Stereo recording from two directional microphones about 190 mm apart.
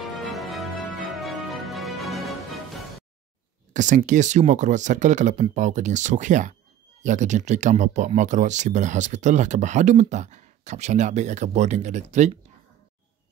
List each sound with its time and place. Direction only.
0.0 s music: centre (ahead or behind)
3.7 s speech: 40° right (ahead or behind)